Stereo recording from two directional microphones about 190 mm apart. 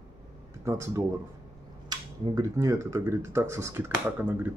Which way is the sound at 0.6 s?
15° right (ahead or behind).